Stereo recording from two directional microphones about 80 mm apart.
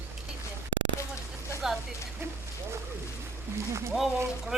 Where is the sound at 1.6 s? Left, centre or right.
Centre.